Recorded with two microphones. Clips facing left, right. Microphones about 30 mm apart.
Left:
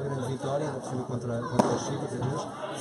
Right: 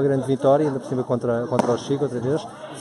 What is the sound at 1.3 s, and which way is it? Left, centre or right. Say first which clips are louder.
Speech: right 10 dB; right.